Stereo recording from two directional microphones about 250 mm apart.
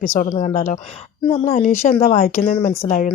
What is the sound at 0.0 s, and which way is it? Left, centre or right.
A woman's voice, left.